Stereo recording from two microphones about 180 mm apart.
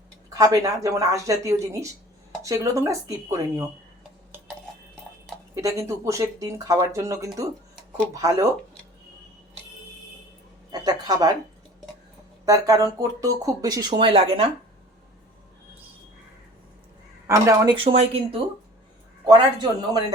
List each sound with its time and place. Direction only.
0.3 s speech: 20° right (ahead or behind)
5.5 s speech: 15° right (ahead or behind)
10.7 s a sound: 20° right (ahead or behind)
12.5 s speech: 20° right (ahead or behind)
17.2 s speech: 15° right (ahead or behind)
17.7 s speech: 35° right (ahead or behind)
19.2 s speech: 20° right (ahead or behind)